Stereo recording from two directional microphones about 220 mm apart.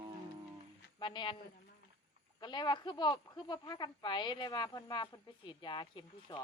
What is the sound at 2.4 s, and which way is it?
A woman's voice, 20° left (ahead or behind).